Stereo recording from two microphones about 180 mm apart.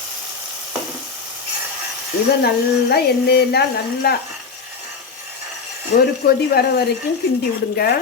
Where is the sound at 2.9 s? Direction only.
60° left (ahead or behind).